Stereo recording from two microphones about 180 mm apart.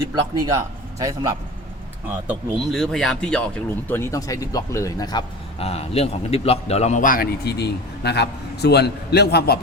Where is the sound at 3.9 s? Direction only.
15° left (ahead or behind).